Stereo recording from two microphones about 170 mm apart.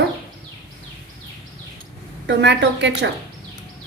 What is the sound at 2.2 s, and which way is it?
Speech, 90° right.